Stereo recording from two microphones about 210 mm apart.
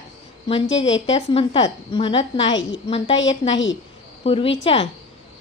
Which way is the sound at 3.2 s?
60° left (ahead or behind).